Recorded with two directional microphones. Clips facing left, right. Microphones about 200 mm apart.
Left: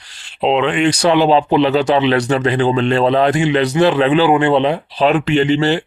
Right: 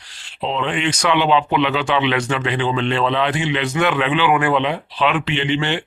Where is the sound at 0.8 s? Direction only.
35° left (ahead or behind).